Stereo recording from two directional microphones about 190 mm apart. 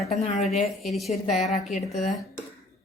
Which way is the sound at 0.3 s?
Centre (ahead or behind).